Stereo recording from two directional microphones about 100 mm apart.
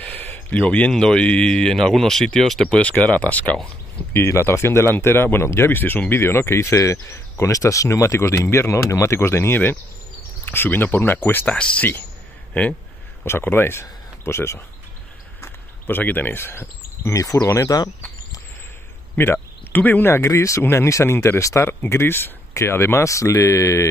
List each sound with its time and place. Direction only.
0.0 s speech: 15° left (ahead or behind)
13.2 s speech: 20° left (ahead or behind)
19.1 s speech: 25° left (ahead or behind)